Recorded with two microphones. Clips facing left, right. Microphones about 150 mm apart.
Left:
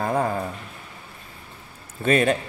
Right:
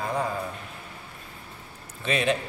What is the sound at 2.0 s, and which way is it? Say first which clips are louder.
Speech: left 6 dB; 45° left (ahead or behind).